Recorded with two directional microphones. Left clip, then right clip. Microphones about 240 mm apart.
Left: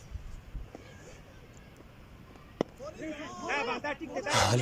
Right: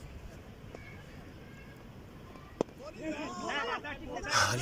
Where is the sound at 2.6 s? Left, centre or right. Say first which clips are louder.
Left 1 dB; centre.